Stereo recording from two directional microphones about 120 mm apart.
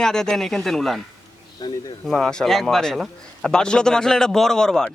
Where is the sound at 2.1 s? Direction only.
5° left (ahead or behind).